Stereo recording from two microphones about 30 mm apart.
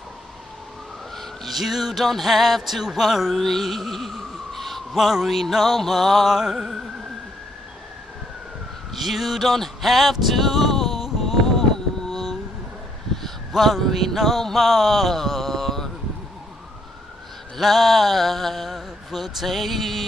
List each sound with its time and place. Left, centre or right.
1.5 s speech: centre
3.3 s a sound: centre
4.9 s speech: centre
6.2 s music: centre
8.9 s a sound: centre
11.1 s music: centre
13.6 s speech: centre
14.4 s a sound: centre
17.6 s speech: centre